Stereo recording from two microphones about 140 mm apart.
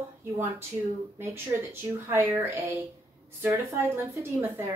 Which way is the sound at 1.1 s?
15° right (ahead or behind).